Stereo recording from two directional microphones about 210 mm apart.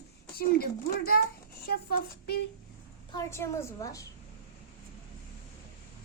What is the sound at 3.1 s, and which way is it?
Speech, 15° left (ahead or behind).